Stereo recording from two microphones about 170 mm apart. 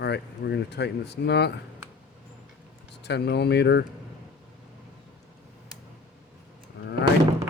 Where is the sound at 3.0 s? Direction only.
80° left.